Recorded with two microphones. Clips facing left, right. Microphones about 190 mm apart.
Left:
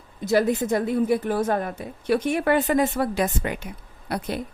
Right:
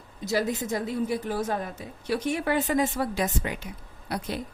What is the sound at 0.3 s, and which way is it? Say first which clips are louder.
A woman's voice: left 6 dB; 55° left (ahead or behind).